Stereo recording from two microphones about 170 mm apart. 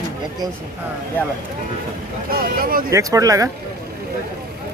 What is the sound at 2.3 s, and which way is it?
Speech, 60° right (ahead or behind).